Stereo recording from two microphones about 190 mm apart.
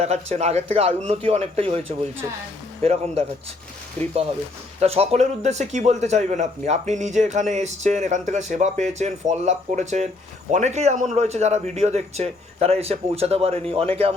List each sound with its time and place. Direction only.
0.0 s a man's voice: 35° right (ahead or behind)
4.0 s speech: 10° left (ahead or behind)
4.8 s a man's voice: 35° right (ahead or behind)